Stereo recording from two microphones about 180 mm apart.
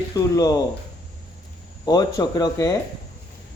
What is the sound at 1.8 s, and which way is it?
Speech, 20° left (ahead or behind).